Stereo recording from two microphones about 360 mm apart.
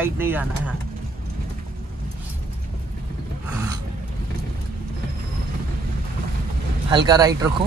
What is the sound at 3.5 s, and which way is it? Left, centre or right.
Gasp, centre.